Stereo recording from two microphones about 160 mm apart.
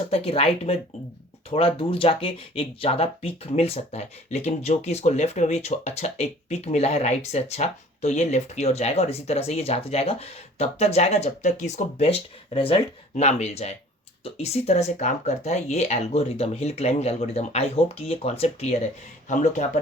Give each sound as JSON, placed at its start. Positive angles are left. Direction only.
{"t": 0.1, "sound": "speech", "side_deg": 40}